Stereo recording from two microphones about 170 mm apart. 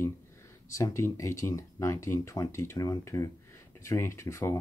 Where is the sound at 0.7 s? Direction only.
15° left (ahead or behind).